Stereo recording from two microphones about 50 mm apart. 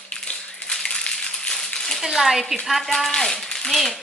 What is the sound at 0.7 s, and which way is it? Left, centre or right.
Coin, centre.